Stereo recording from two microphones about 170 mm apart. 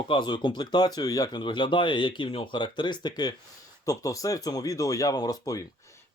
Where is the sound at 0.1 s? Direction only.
30° left (ahead or behind).